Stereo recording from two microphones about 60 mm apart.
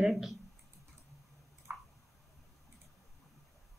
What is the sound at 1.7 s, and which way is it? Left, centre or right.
Squish, right.